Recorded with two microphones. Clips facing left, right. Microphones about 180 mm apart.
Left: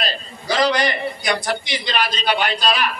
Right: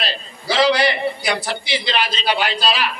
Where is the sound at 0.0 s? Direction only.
45° left (ahead or behind).